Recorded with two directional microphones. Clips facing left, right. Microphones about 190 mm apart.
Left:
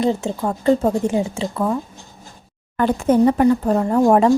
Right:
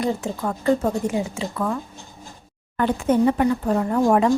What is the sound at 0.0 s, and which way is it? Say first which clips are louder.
Speech: left 4 dB; 25° left (ahead or behind).